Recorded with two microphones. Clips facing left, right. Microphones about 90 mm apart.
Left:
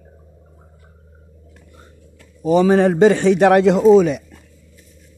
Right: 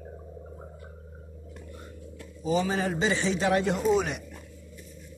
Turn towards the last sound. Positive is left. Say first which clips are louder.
# left 13 dB
turn(degrees=90)